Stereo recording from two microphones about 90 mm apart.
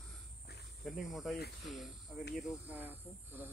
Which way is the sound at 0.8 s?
Centre (ahead or behind).